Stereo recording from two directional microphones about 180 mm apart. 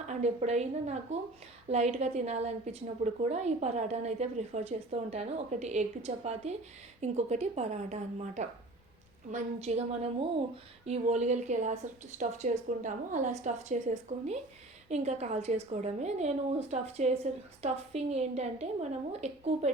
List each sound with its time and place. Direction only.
0.1 s a woman's voice: 35° right (ahead or behind)